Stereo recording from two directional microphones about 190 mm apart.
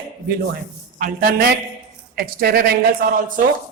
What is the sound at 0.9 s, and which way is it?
Speech, 50° right (ahead or behind).